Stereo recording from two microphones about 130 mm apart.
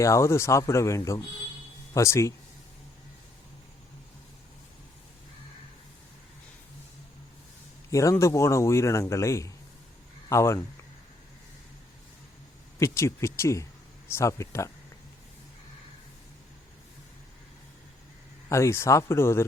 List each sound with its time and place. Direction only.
0.0 s speech: 20° left (ahead or behind)
7.9 s a man's voice: 25° left (ahead or behind)
12.8 s speech: 20° left (ahead or behind)
18.4 s speech: 20° left (ahead or behind)